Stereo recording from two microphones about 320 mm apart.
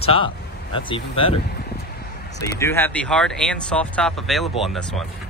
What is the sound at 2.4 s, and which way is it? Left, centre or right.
Speech, centre.